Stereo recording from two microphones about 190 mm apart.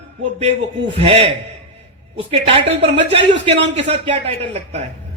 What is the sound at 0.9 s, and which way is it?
Speech, 30° right (ahead or behind).